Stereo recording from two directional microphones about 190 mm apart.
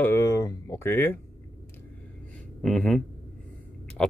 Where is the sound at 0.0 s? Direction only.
15° left (ahead or behind).